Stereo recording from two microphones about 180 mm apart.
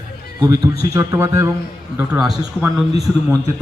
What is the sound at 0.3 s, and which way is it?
A man's voice, 20° right (ahead or behind).